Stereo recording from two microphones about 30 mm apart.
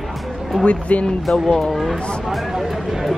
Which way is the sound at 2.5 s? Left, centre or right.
Centre.